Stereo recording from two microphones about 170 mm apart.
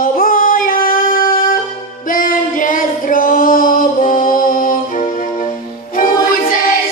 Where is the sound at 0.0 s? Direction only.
55° left (ahead or behind).